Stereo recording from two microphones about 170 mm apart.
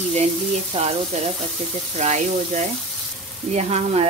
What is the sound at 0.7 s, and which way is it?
Speech, 35° right (ahead or behind).